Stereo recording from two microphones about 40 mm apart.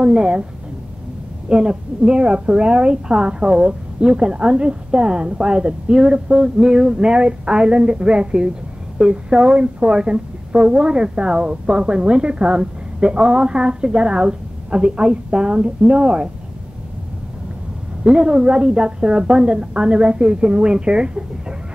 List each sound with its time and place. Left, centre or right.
0.0 s a woman's voice: right
1.5 s a woman's voice: right
18.0 s a woman's voice: centre